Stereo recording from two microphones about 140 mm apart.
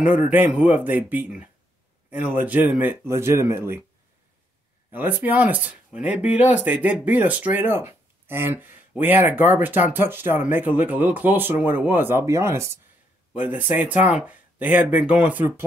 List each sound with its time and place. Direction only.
0.3 s speech: 10° right (ahead or behind)
4.9 s speech: 15° right (ahead or behind)